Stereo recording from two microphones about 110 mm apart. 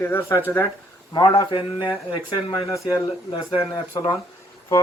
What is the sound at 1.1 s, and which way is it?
Speech, 40° left (ahead or behind).